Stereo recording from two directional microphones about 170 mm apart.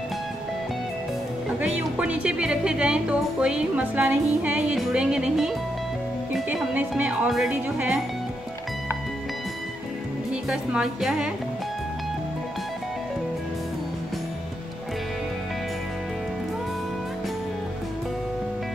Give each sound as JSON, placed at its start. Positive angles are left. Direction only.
{"t": 1.6, "sound": "speech", "side_deg": -5}
{"t": 10.5, "sound": "speech", "side_deg": -5}